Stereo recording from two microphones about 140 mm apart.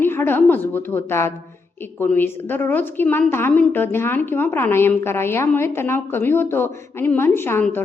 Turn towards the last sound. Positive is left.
turn(degrees=15)  # may be behind; listen again after turning